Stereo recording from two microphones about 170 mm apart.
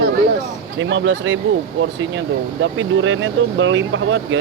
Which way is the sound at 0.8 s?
90° right.